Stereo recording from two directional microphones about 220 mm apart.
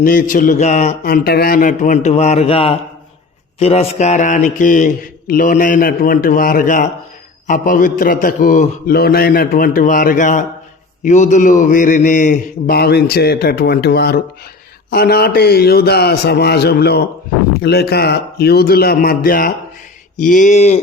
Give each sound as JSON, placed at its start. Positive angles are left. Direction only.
{"t": 0.0, "sound": "a man's voice", "side_deg": 40}